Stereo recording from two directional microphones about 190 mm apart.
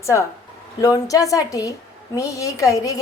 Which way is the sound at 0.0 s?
15° left (ahead or behind).